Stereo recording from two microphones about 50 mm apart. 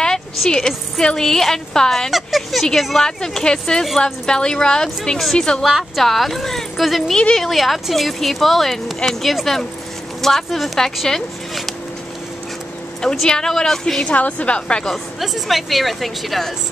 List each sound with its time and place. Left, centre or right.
0.5 s a woman's voice: centre
2.0 s a woman's voice: centre
5.7 s speech: centre
13.2 s a woman's voice: centre
14.0 s a woman's voice: left
14.9 s speech: centre